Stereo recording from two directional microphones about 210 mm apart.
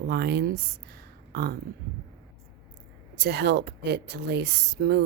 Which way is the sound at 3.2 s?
55° right (ahead or behind).